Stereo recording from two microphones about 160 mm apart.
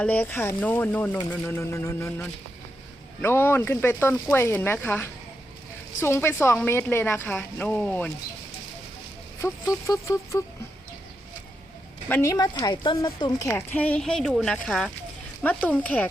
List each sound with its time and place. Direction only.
0.0 s speech: 10° left (ahead or behind)
9.4 s speech: 20° left (ahead or behind)
12.0 s speech: 15° left (ahead or behind)
13.5 s speech: 10° left (ahead or behind)